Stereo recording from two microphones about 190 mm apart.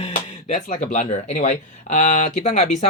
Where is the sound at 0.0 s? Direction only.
35° left (ahead or behind).